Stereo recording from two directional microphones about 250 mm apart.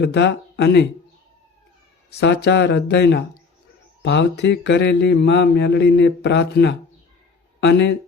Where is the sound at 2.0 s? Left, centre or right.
Left.